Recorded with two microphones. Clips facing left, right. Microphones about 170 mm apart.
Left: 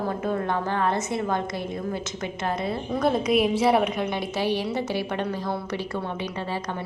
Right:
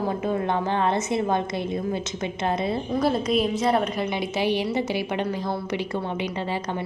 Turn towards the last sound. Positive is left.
turn(degrees=-10)  # may be behind; listen again after turning